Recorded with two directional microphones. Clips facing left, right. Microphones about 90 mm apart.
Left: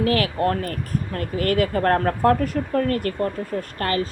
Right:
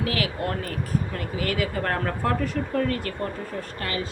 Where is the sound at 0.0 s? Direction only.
45° left (ahead or behind).